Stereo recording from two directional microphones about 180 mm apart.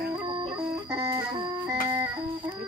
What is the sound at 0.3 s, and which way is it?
Music, 25° right (ahead or behind).